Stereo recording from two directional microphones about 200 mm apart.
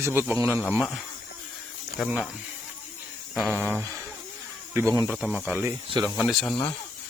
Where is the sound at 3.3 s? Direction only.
5° right (ahead or behind).